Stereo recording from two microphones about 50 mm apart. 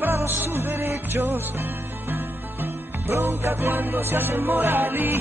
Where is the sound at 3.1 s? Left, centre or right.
Right.